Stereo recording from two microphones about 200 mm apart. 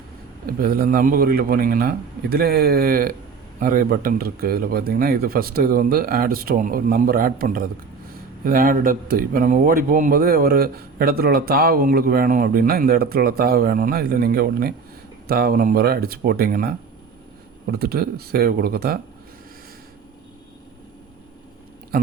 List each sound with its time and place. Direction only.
0.4 s speech: 45° right (ahead or behind)